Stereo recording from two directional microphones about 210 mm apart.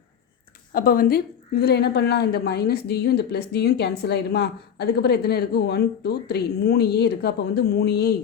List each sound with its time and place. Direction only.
0.7 s a woman's voice: 45° left (ahead or behind)